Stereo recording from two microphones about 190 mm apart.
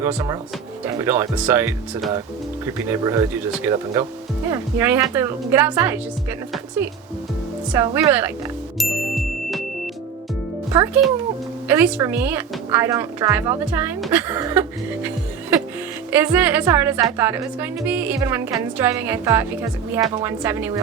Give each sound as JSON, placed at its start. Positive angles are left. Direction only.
{"t": 0.0, "sound": "a woman's voice", "side_deg": -15}
{"t": 7.7, "sound": "a woman's voice", "side_deg": -15}
{"t": 8.8, "sound": "music", "side_deg": 0}
{"t": 10.7, "sound": "a child's voice", "side_deg": -15}
{"t": 16.1, "sound": "a woman's voice", "side_deg": -10}